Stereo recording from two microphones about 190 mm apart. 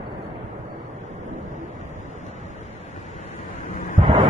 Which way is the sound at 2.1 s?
40° left (ahead or behind).